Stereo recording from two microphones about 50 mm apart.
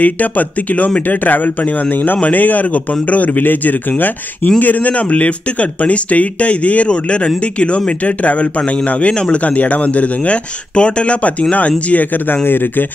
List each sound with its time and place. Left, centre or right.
0.0 s a man's voice: left
12.3 s speech: left